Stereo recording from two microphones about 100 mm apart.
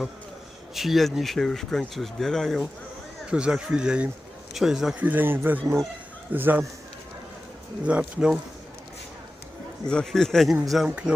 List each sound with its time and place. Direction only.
0.7 s speech: centre (ahead or behind)
3.2 s speech: 10° right (ahead or behind)
4.9 s speech: 15° right (ahead or behind)
5.6 s speech: 35° right (ahead or behind)
6.3 s speech: 20° right (ahead or behind)
7.9 s speech: 10° right (ahead or behind)
9.8 s speech: 5° left (ahead or behind)
10.8 s speech: 10° right (ahead or behind)